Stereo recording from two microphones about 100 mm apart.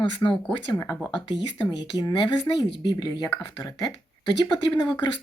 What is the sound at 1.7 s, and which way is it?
Speech, 45° left (ahead or behind).